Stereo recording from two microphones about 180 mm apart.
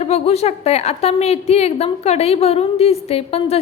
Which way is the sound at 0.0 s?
35° left (ahead or behind).